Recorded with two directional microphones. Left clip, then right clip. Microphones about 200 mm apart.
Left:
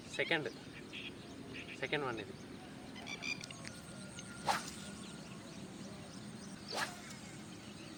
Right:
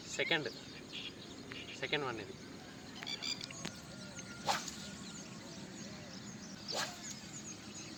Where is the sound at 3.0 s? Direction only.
30° right (ahead or behind).